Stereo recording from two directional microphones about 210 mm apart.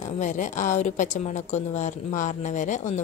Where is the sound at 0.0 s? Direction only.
35° left (ahead or behind).